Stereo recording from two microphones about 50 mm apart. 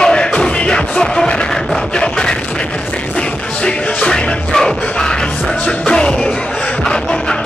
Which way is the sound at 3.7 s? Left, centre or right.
Centre.